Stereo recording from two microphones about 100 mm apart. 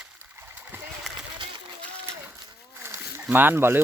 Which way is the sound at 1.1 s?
Centre (ahead or behind).